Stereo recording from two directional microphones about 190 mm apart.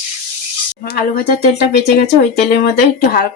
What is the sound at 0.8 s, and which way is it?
Speech, 55° left (ahead or behind).